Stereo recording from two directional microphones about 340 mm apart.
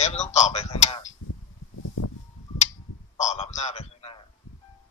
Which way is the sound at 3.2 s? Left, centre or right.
Centre.